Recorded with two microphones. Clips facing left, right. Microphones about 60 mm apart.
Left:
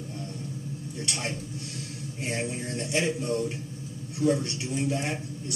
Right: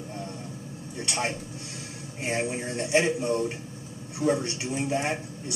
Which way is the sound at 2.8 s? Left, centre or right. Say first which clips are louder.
Right 4 dB; right.